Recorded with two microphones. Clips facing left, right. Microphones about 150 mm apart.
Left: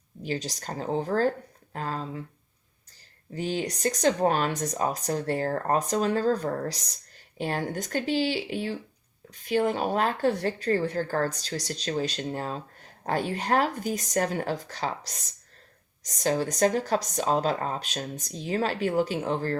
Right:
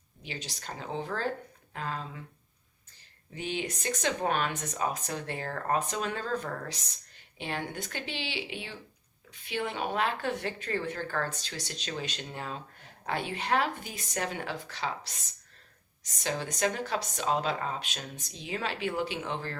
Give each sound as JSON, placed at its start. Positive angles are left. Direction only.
{"t": 0.2, "sound": "speech", "side_deg": 40}
{"t": 3.3, "sound": "speech", "side_deg": 40}